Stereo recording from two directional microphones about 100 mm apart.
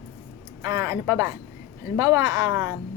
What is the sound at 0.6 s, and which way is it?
A woman's voice, 35° right (ahead or behind).